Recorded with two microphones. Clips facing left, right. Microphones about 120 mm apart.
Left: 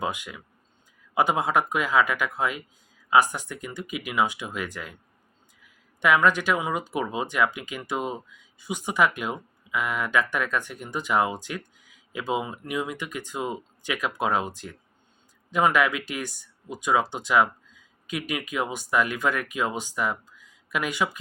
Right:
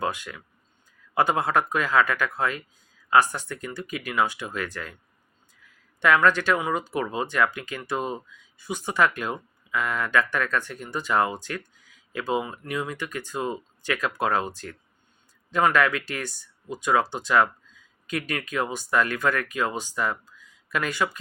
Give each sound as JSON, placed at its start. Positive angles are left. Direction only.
{"t": 0.0, "sound": "speech", "side_deg": 15}